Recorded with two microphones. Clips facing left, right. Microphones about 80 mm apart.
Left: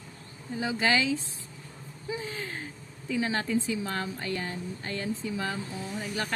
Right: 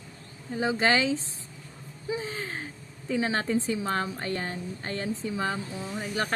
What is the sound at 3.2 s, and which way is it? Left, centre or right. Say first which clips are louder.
Speech: right 1 dB; right.